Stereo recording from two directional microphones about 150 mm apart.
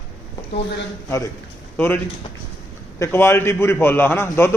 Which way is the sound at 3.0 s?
15° left (ahead or behind).